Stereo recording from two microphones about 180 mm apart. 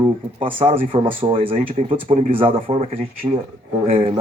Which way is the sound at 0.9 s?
30° right (ahead or behind).